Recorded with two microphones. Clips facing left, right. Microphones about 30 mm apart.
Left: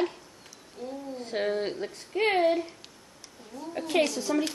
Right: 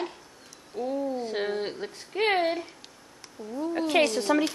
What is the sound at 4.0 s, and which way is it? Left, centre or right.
Speech, right.